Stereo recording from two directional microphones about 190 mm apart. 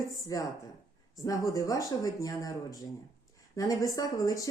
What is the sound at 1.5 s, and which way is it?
Speech, 20° left (ahead or behind).